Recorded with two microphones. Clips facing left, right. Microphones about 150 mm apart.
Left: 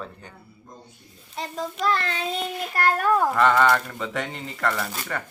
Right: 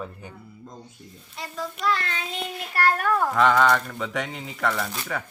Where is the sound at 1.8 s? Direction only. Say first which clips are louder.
Left 2 dB; 40° left (ahead or behind).